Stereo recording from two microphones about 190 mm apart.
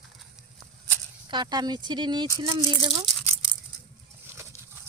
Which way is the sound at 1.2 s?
25° right (ahead or behind).